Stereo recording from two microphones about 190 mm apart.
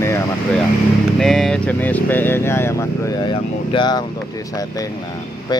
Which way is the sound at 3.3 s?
25° left (ahead or behind).